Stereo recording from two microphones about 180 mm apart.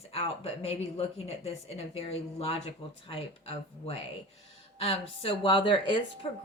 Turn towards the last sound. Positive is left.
turn(degrees=30)  # may be behind; listen again after turning